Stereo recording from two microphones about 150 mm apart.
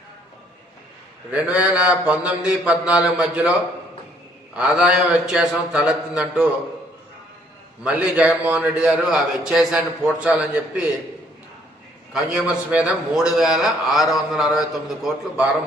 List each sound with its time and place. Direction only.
1.3 s a man's voice: 10° right (ahead or behind)
4.5 s a man's voice: 5° right (ahead or behind)
7.9 s a man's voice: 5° right (ahead or behind)
12.1 s a man's voice: 5° right (ahead or behind)